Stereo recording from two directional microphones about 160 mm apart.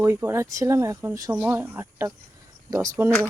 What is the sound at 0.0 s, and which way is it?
Speech, 15° right (ahead or behind).